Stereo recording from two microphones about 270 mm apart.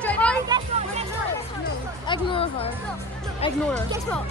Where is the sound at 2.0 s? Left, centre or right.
Centre.